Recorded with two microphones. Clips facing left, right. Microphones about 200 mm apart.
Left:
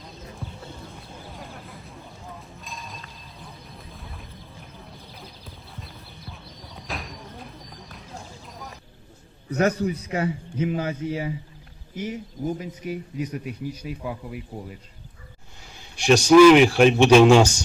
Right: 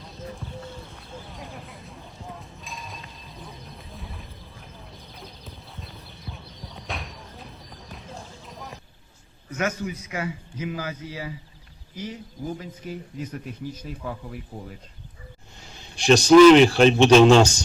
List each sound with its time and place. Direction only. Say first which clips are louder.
2.6 s a sound: even; centre (ahead or behind)
6.3 s horse: right 1 dB; centre (ahead or behind)
9.5 s a man's voice: left 6 dB; 35° left (ahead or behind); by 14.8 s 5° left (ahead or behind)
16.0 s speech: right 1 dB; 10° left (ahead or behind)